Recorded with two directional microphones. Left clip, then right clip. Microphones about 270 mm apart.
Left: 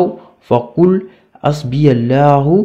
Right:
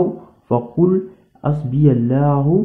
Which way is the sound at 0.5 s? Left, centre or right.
Left.